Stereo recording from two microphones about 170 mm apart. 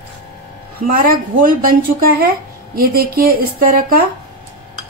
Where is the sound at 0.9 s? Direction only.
55° right (ahead or behind).